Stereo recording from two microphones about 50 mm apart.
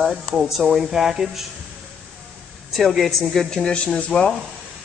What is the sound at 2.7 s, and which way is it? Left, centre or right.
Speech, centre.